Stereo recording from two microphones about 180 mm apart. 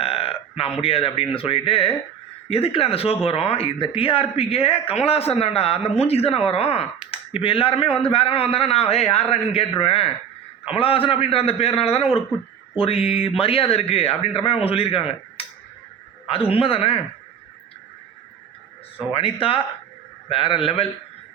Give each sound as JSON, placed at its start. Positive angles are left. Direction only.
{"t": 0.0, "sound": "speech", "side_deg": 30}
{"t": 19.1, "sound": "a man's voice", "side_deg": 30}